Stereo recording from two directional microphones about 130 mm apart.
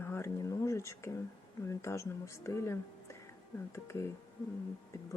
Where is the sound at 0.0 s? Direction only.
20° left (ahead or behind).